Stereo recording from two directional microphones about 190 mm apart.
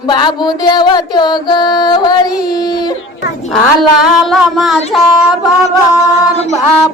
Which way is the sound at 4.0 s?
Centre (ahead or behind).